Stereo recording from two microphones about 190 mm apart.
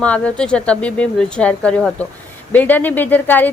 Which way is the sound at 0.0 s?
5° left (ahead or behind).